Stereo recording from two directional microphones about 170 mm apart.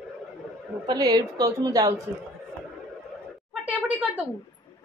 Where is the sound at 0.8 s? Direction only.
20° right (ahead or behind).